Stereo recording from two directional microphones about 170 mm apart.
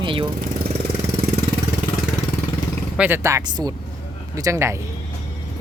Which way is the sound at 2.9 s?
10° right (ahead or behind).